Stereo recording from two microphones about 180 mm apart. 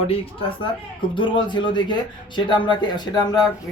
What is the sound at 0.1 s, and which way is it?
A woman's voice, 30° left (ahead or behind).